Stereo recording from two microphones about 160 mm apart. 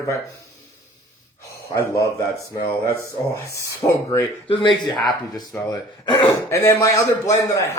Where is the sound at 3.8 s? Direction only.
15° left (ahead or behind).